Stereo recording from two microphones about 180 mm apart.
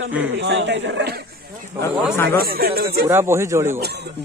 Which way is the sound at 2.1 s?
15° left (ahead or behind).